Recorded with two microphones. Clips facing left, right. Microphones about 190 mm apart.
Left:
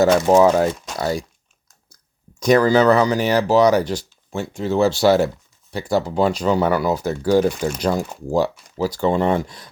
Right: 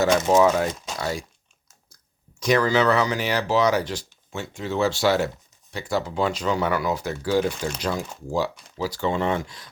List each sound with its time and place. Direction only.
0.3 s speech: 40° left (ahead or behind)
2.4 s speech: 40° left (ahead or behind)